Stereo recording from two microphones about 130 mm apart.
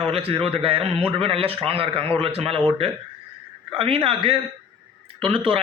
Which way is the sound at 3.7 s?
45° right (ahead or behind).